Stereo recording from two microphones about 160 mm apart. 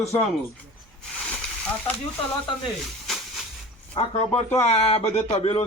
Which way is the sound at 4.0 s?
30° left (ahead or behind).